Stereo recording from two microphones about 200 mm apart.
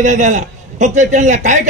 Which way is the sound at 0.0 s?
35° right (ahead or behind).